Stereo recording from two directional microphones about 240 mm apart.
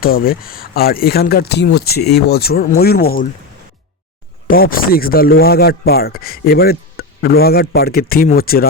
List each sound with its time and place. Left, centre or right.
0.0 s speech: left
4.4 s speech: left